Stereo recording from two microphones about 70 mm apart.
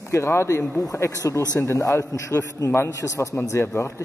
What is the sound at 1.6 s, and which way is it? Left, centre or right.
A man's voice, left.